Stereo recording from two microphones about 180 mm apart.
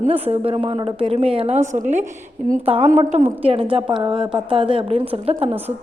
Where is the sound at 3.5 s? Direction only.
30° right (ahead or behind).